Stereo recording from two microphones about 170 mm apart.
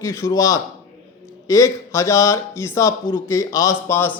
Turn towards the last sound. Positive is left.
turn(degrees=15)  # may be behind; listen again after turning